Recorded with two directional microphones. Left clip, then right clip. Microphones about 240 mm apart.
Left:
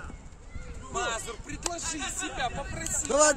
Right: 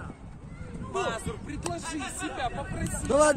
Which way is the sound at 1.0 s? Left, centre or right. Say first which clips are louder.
Even; left.